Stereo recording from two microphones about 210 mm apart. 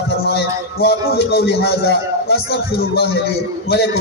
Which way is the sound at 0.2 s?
50° left (ahead or behind).